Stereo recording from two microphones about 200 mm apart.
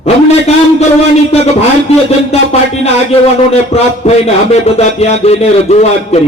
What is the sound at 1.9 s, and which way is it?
Music, 30° left (ahead or behind).